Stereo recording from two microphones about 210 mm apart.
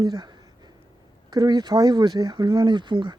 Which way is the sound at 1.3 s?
20° right (ahead or behind).